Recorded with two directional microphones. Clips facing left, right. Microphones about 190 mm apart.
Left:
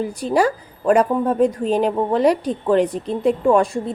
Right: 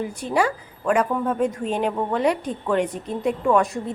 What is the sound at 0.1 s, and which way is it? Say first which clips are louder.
A woman's voice: left 4 dB; 35° left (ahead or behind).